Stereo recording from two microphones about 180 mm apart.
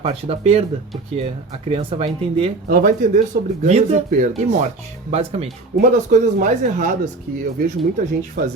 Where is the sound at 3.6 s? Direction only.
40° right (ahead or behind).